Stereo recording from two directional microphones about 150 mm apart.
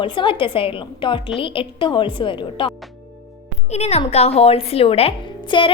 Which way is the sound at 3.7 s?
45° left (ahead or behind).